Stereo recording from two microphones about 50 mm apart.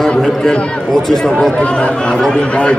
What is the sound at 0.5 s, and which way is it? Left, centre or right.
Speech, left.